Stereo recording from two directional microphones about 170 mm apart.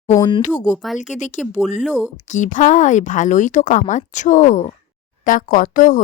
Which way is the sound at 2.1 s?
45° left (ahead or behind).